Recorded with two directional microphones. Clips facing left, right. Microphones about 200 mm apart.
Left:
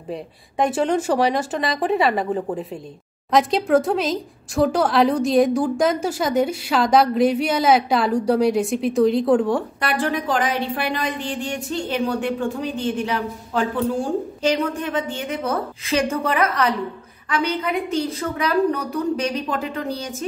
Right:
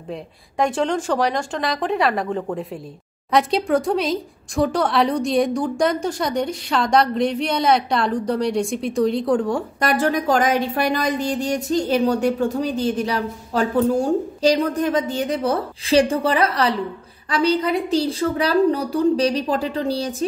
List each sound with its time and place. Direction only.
0.1 s speech: 5° left (ahead or behind)
9.8 s a woman's voice: 45° right (ahead or behind)